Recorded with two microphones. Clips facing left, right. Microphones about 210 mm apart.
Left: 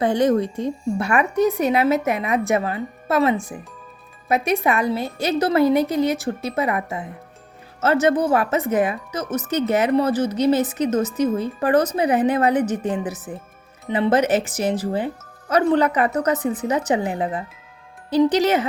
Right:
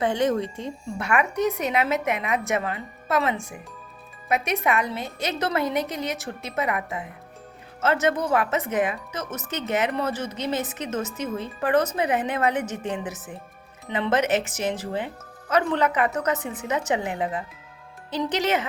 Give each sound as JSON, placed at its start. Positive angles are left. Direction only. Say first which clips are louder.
{"t": 0.0, "sound": "speech", "louder": "left 5 dB", "side_deg": 35}